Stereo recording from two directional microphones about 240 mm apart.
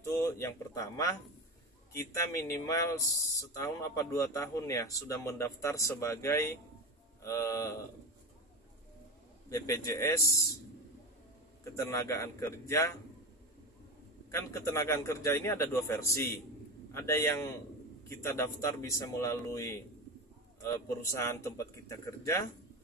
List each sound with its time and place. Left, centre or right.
0.0 s speech: centre
2.1 s a man's voice: centre
9.5 s a man's voice: centre
11.6 s a man's voice: centre
14.3 s a man's voice: centre